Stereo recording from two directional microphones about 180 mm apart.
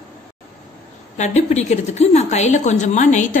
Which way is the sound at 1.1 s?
40° left (ahead or behind).